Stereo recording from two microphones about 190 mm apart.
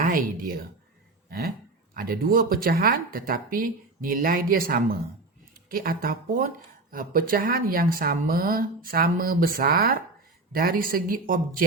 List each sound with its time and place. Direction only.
0.0 s a woman's voice: 45° right (ahead or behind)